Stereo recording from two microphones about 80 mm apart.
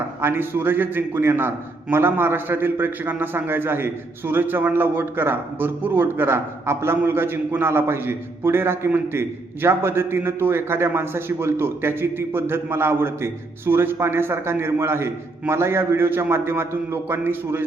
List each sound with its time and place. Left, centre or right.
0.2 s a man's voice: right